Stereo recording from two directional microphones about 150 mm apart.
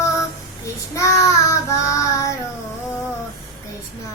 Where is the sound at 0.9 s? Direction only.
20° left (ahead or behind).